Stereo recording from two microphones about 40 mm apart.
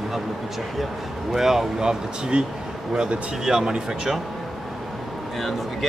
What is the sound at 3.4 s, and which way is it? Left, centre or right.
Speech, centre.